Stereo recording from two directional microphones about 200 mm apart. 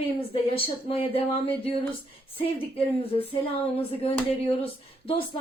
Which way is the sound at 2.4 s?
30° left (ahead or behind).